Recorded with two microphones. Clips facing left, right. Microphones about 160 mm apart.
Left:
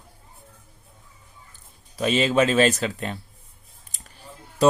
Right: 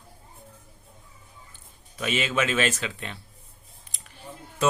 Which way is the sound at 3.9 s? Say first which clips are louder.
Right 2 dB; 40° left (ahead or behind).